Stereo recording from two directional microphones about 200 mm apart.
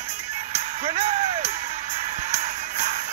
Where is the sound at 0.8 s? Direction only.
35° right (ahead or behind).